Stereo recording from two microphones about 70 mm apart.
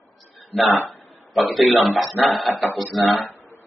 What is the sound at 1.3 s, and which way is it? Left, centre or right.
A man's voice, centre.